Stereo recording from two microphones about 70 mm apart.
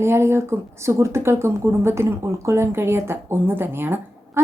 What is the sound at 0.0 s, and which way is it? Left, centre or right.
Speech, right.